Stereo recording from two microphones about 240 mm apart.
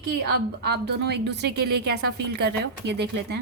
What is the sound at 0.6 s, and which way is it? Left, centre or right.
A woman's voice, right.